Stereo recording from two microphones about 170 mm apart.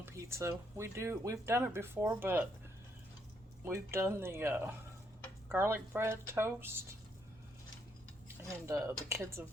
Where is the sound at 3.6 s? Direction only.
15° right (ahead or behind).